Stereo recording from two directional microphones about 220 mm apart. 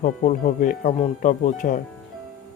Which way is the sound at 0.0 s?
35° left (ahead or behind).